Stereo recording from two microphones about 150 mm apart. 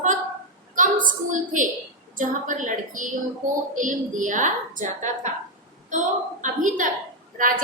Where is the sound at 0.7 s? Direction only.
60° right (ahead or behind).